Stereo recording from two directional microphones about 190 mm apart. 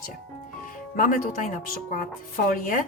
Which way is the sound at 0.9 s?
45° left (ahead or behind).